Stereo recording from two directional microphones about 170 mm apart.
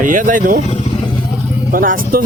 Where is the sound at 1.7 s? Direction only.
55° right (ahead or behind).